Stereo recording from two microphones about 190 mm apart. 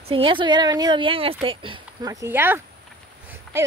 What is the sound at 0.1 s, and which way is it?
Speech, 25° right (ahead or behind).